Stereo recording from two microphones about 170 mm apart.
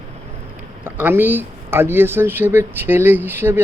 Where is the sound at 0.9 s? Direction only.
10° right (ahead or behind).